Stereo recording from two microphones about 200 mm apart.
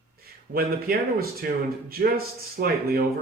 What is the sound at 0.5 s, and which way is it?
Speech, 50° right (ahead or behind).